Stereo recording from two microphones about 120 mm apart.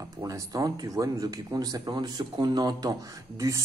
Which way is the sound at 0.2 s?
30° right (ahead or behind).